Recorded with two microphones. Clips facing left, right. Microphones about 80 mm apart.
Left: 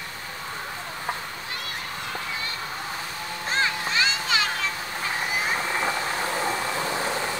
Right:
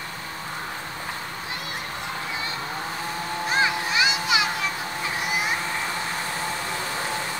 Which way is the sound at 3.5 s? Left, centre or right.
Centre.